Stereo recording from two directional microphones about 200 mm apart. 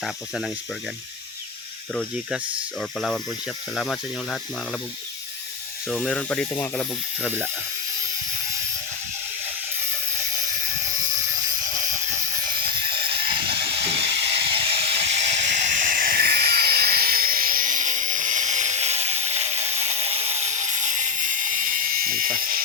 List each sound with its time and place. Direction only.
0.0 s speech: centre (ahead or behind)
1.9 s speech: 5° left (ahead or behind)
3.8 s speech: 5° left (ahead or behind)
6.1 s speech: 5° left (ahead or behind)
10.8 s ratchet: 15° right (ahead or behind)
15.4 s helicopter: 35° right (ahead or behind)